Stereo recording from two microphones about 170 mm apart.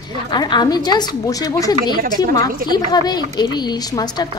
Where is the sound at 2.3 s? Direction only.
20° left (ahead or behind).